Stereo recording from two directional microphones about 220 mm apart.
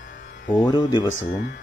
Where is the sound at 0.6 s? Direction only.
20° left (ahead or behind).